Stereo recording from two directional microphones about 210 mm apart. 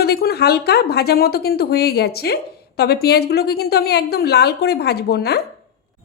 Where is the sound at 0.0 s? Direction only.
45° left (ahead or behind).